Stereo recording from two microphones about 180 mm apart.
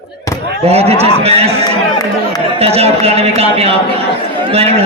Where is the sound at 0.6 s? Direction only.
35° right (ahead or behind).